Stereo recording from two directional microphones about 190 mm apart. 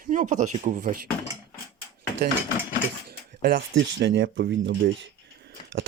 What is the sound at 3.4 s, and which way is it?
Speech, 60° right (ahead or behind).